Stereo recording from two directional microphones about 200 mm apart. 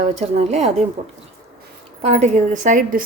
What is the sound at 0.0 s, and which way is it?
Speech, 35° right (ahead or behind).